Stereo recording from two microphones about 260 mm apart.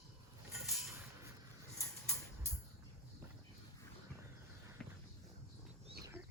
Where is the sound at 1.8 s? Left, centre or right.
Centre.